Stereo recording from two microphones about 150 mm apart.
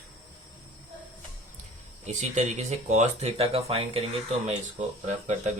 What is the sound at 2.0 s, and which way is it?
Speech, 50° right (ahead or behind).